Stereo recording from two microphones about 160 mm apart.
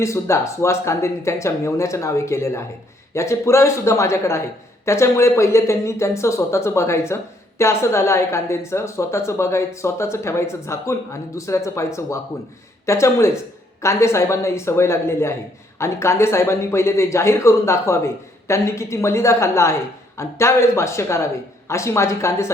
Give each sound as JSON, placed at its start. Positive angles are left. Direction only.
{"t": 0.0, "sound": "a woman's voice", "side_deg": 20}